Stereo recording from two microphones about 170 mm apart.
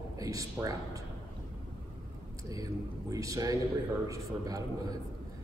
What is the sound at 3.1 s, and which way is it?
A man's voice, 20° right (ahead or behind).